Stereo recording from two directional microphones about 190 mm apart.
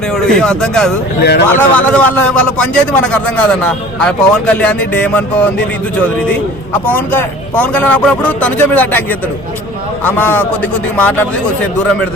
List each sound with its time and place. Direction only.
0.3 s speech: 5° left (ahead or behind)
1.2 s a man's voice: 60° left (ahead or behind)
1.5 s a man's voice: 10° left (ahead or behind)
6.8 s a man's voice: 10° left (ahead or behind)